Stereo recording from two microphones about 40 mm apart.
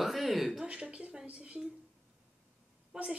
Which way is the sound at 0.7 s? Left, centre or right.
Right.